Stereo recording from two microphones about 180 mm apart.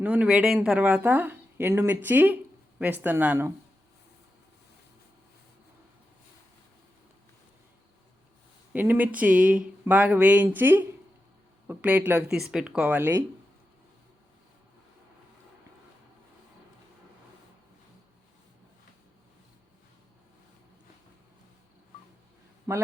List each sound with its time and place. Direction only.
0.0 s speech: 10° right (ahead or behind)
8.7 s speech: 10° right (ahead or behind)
22.7 s a man's voice: 20° right (ahead or behind)